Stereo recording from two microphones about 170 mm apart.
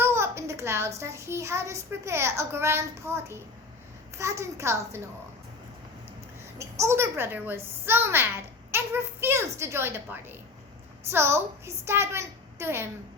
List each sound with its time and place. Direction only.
0.0 s a child's voice: 15° right (ahead or behind)
6.6 s a woman's voice: 15° right (ahead or behind)